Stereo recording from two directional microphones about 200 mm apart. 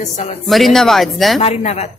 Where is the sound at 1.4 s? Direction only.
30° left (ahead or behind).